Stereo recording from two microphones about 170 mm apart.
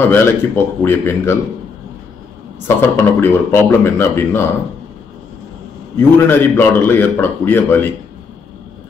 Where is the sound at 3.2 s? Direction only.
15° left (ahead or behind).